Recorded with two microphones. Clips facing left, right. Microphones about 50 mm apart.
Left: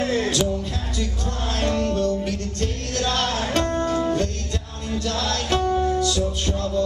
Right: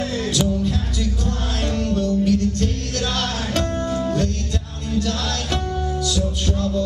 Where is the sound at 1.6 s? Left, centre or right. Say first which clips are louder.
Left 1 dB; centre.